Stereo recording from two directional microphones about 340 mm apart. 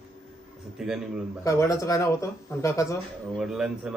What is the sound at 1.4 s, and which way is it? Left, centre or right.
Speech, centre.